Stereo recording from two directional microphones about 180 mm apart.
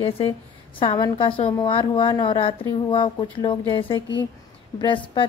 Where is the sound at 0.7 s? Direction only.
25° left (ahead or behind).